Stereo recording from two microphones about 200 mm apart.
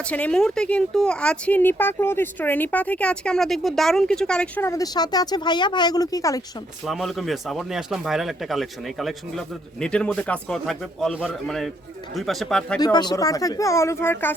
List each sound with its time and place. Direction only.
0.0 s speech: 5° left (ahead or behind)
6.8 s speech: centre (ahead or behind)
12.8 s speech: 20° left (ahead or behind)